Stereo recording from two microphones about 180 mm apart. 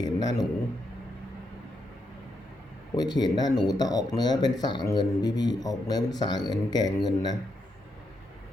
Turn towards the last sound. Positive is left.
turn(degrees=20)  # may be behind; listen again after turning